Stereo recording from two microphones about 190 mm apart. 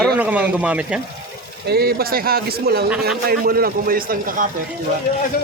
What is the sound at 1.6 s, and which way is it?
Speech, 55° right (ahead or behind).